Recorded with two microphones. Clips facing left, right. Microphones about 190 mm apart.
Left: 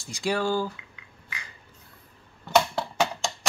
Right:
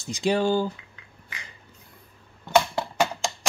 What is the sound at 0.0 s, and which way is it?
Speech, 20° right (ahead or behind).